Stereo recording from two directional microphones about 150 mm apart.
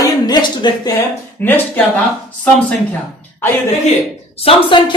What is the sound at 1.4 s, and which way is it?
Speech, 15° left (ahead or behind).